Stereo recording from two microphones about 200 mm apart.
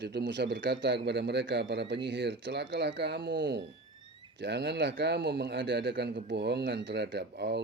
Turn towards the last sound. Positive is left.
turn(degrees=-55)  # may be behind; listen again after turning